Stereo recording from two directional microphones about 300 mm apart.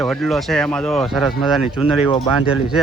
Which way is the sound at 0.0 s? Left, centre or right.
Centre.